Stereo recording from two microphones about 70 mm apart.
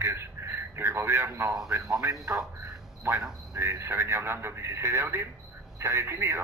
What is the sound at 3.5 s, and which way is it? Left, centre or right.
A man's voice, right.